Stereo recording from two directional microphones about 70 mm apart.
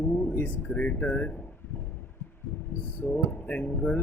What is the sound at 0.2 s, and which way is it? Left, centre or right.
Speech, left.